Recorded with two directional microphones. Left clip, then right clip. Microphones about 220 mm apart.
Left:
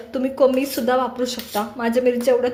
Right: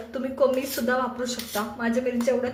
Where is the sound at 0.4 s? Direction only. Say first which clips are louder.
Left 5 dB; 30° left (ahead or behind).